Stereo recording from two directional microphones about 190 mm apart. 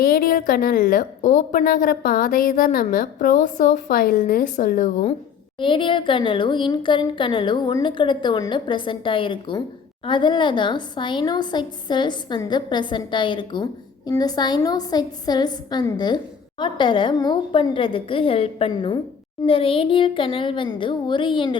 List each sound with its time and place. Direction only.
0.0 s a woman's voice: 50° left (ahead or behind)
5.5 s a woman's voice: 25° left (ahead or behind)